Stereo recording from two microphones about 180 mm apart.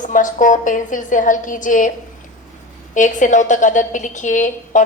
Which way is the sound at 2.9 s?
45° left (ahead or behind).